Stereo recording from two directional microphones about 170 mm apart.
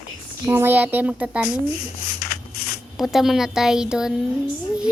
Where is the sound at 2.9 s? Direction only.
Centre (ahead or behind).